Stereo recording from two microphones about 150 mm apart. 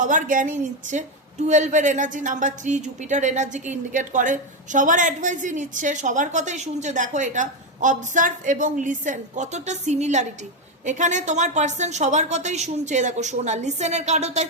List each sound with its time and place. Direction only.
0.0 s a woman's voice: 60° right (ahead or behind)